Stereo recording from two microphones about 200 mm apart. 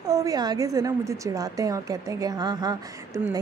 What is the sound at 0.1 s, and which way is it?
A woman's voice, 20° right (ahead or behind).